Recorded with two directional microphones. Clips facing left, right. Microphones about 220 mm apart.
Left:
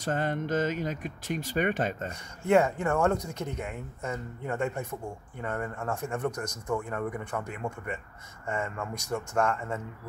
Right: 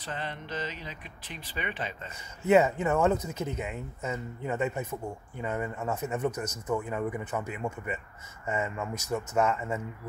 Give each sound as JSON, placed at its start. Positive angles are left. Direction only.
{"t": 0.0, "sound": "speech", "side_deg": 45}
{"t": 2.4, "sound": "speech", "side_deg": -5}